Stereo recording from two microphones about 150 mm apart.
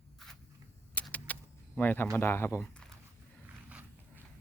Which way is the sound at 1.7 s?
15° left (ahead or behind).